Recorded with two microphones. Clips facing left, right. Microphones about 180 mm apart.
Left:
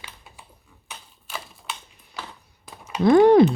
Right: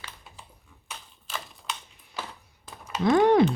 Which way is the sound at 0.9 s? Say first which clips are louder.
Even; 5° left (ahead or behind).